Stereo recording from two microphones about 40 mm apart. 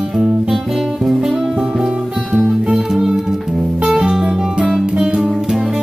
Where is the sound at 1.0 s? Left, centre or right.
Centre.